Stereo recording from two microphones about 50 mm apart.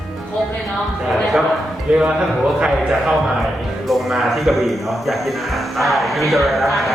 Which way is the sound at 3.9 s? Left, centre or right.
Centre.